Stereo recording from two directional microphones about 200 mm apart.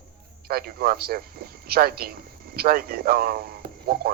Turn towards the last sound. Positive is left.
turn(degrees=-50)  # may be behind; listen again after turning